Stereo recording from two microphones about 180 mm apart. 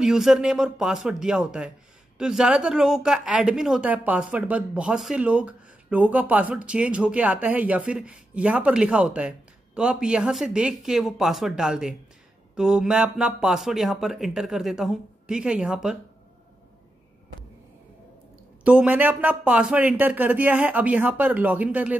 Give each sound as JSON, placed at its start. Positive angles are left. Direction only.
{"t": 0.0, "sound": "a woman's voice", "side_deg": -5}
{"t": 18.6, "sound": "a woman's voice", "side_deg": -5}